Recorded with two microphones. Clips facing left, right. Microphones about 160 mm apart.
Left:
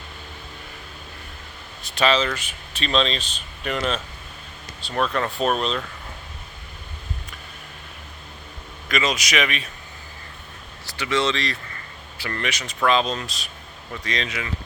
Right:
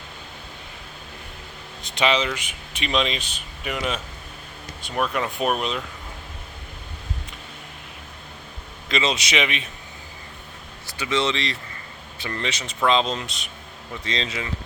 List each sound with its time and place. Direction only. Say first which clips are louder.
1.8 s speech: left 1 dB; 15° right (ahead or behind)
8.9 s speech: even; 25° right (ahead or behind)
10.8 s speech: left 1 dB; 20° right (ahead or behind)